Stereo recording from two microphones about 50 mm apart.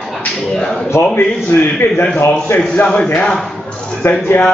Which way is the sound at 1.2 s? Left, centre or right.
Left.